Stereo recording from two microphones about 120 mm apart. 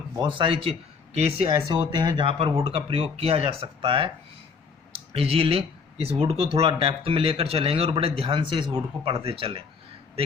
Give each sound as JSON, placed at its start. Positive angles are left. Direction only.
{"t": 0.2, "sound": "speech", "side_deg": -45}
{"t": 1.5, "sound": "speech", "side_deg": -45}